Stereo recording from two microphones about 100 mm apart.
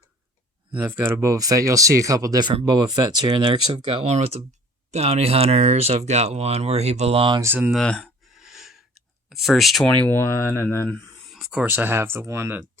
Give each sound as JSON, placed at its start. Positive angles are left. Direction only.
{"t": 0.8, "sound": "speech", "side_deg": -25}
{"t": 2.6, "sound": "speech", "side_deg": -45}
{"t": 7.4, "sound": "speech", "side_deg": -20}
{"t": 7.7, "sound": "speech", "side_deg": 5}
{"t": 8.4, "sound": "a sound", "side_deg": -5}
{"t": 9.3, "sound": "speech", "side_deg": 0}
{"t": 9.8, "sound": "speech", "side_deg": 15}
{"t": 10.2, "sound": "speech", "side_deg": 25}
{"t": 11.3, "sound": "a sound", "side_deg": 0}
{"t": 11.5, "sound": "speech", "side_deg": -20}